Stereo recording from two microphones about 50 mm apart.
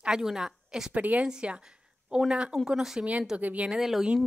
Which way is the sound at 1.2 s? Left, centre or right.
Centre.